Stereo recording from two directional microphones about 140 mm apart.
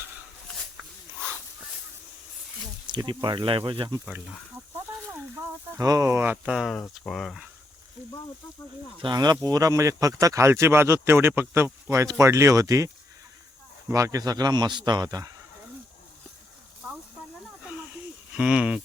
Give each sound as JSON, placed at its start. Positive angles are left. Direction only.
{"t": 2.9, "sound": "speech", "side_deg": -30}
{"t": 5.1, "sound": "a sound", "side_deg": -15}
{"t": 5.8, "sound": "speech", "side_deg": -25}
{"t": 9.0, "sound": "speech", "side_deg": -30}
{"t": 18.3, "sound": "speech", "side_deg": -5}